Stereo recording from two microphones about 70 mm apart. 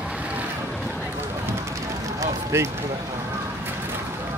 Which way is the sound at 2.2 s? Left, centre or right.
Right.